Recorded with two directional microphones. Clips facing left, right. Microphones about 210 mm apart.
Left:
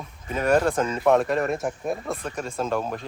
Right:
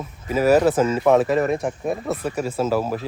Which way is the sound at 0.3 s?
5° right (ahead or behind).